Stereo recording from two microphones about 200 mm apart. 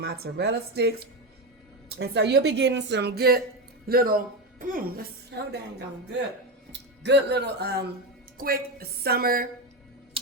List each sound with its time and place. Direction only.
0.0 s a woman's voice: 55° right (ahead or behind)
5.3 s a woman's voice: 60° right (ahead or behind)
6.7 s a woman's voice: 60° right (ahead or behind)